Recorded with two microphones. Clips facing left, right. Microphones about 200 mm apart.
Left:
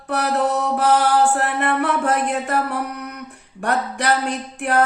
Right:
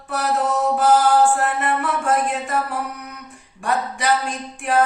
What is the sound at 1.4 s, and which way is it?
Music, 65° left (ahead or behind).